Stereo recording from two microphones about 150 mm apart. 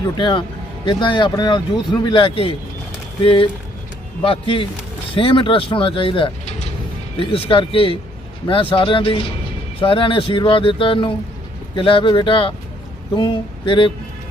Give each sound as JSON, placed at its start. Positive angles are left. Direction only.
{"t": 0.2, "sound": "speech", "side_deg": 35}